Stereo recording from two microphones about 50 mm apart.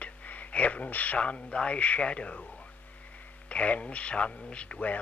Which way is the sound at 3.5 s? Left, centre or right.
Left.